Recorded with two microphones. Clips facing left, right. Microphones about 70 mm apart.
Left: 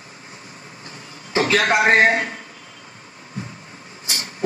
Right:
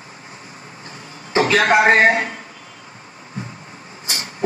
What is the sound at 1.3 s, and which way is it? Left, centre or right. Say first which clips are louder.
A man's voice: right 3 dB; right.